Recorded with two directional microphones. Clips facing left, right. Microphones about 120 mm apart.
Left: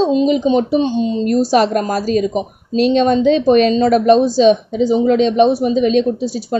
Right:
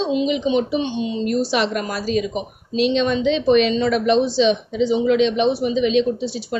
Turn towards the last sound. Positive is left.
turn(degrees=40)  # may be behind; listen again after turning